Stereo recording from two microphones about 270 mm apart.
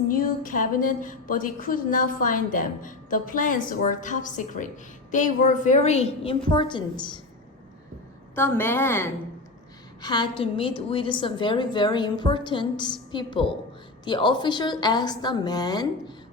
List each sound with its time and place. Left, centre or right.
0.1 s a woman's voice: left
8.4 s a woman's voice: centre